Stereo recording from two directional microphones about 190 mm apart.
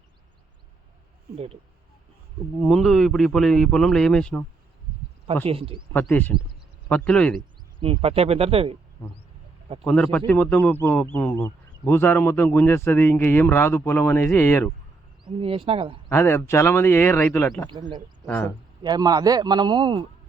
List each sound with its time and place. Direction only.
2.6 s a man's voice: centre (ahead or behind)
5.5 s a man's voice: 30° right (ahead or behind)
5.9 s speech: 10° left (ahead or behind)
7.8 s speech: 30° right (ahead or behind)
9.8 s speech: 5° left (ahead or behind)
15.2 s a man's voice: 25° right (ahead or behind)
16.0 s speech: 10° left (ahead or behind)
17.7 s a man's voice: 25° right (ahead or behind)